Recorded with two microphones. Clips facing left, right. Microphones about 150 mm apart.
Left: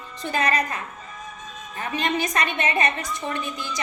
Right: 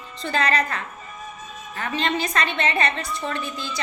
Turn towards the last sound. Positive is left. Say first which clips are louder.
# even
turn(degrees=15)  # may be behind; listen again after turning